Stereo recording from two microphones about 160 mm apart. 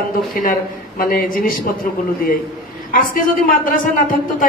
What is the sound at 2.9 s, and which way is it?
A woman's voice, 60° left (ahead or behind).